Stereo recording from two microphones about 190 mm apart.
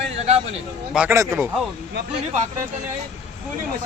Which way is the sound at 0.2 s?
35° right (ahead or behind).